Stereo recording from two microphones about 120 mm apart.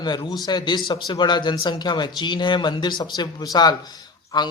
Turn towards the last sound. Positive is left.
turn(degrees=35)  # may be behind; listen again after turning